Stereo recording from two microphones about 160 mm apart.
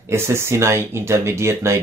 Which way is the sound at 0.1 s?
15° right (ahead or behind).